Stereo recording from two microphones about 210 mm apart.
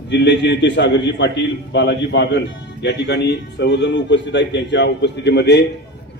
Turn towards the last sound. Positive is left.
turn(degrees=55)  # may be behind; listen again after turning